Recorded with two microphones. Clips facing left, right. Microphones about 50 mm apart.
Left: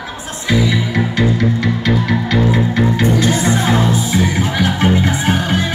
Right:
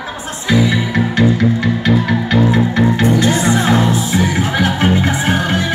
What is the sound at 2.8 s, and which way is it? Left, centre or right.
Music, right.